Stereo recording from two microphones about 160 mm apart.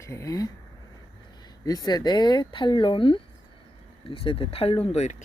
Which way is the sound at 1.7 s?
25° left (ahead or behind).